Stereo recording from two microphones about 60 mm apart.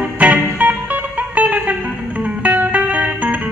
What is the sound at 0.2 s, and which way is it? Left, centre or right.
Music, right.